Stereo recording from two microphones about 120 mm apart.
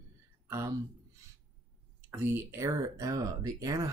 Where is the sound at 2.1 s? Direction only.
15° right (ahead or behind).